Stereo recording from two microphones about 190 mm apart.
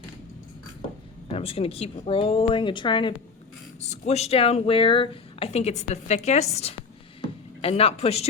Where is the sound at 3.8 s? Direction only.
35° left (ahead or behind).